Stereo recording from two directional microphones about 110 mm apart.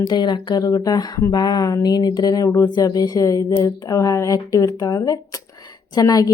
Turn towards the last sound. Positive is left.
turn(degrees=35)  # may be behind; listen again after turning